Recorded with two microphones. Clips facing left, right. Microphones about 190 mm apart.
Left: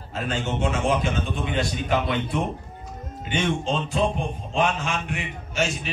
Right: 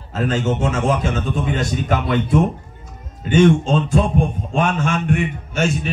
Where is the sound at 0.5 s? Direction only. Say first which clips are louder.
Right 1 dB; 45° right (ahead or behind).